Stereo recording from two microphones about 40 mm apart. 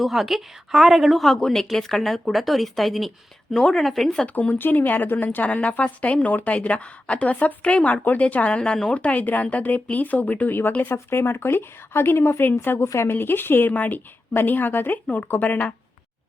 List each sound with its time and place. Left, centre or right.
0.0 s a woman's voice: centre
3.5 s speech: centre
4.4 s a woman's voice: left
5.5 s speech: left
8.5 s speech: left
9.2 s a woman's voice: left
10.8 s a woman's voice: left
13.7 s a woman's voice: left